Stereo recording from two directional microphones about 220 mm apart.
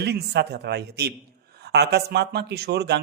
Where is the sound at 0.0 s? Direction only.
50° right (ahead or behind).